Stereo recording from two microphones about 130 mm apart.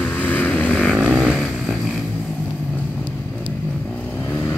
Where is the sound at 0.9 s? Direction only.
10° right (ahead or behind).